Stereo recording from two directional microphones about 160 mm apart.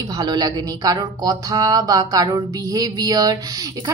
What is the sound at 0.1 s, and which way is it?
Speech, 25° right (ahead or behind).